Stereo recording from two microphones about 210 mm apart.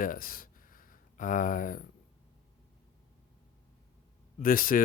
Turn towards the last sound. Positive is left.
turn(degrees=40)  # may be behind; listen again after turning